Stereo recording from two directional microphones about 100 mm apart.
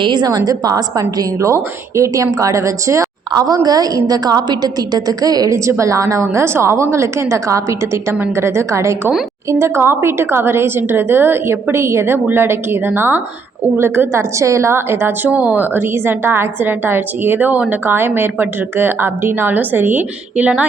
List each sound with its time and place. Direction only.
0.0 s a woman's voice: 45° right (ahead or behind); by 20.7 s 15° right (ahead or behind)